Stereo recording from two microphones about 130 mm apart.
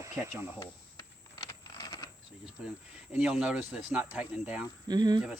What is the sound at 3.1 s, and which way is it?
Speech, 10° right (ahead or behind).